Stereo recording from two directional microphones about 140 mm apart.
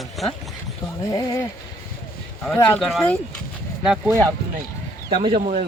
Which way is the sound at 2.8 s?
Centre (ahead or behind).